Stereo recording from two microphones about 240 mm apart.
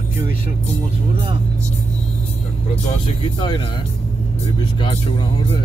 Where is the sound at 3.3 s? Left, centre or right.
Centre.